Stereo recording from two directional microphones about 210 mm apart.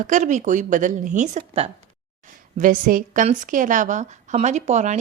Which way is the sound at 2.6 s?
40° right (ahead or behind).